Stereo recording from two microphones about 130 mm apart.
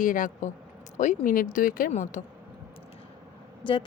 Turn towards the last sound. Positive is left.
turn(degrees=40)  # may be behind; listen again after turning